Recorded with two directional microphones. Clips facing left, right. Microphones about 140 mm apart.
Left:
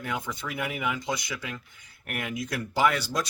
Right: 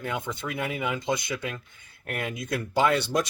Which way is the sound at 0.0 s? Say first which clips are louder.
Right 2 dB; 25° right (ahead or behind).